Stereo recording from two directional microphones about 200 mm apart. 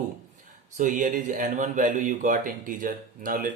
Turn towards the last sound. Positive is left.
turn(degrees=-45)  # may be behind; listen again after turning